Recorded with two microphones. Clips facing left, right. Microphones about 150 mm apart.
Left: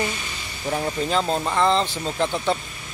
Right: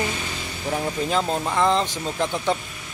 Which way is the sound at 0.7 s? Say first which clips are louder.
Even; 5° right (ahead or behind).